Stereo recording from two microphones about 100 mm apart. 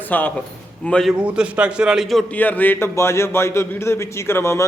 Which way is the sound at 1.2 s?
10° right (ahead or behind).